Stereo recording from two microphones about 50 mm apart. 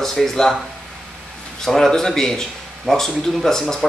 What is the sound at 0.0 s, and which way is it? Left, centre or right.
Speech, centre.